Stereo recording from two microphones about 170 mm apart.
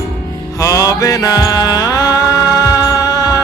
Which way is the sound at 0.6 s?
20° left (ahead or behind).